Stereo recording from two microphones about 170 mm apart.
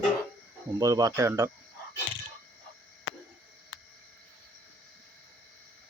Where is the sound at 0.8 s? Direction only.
20° right (ahead or behind).